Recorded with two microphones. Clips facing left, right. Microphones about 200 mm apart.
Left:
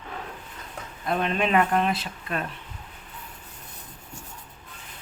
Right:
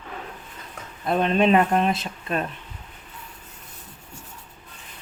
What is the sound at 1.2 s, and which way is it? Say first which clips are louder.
Speech: right 5 dB; 30° right (ahead or behind).